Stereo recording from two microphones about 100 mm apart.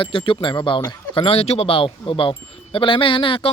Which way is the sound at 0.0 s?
60° left (ahead or behind).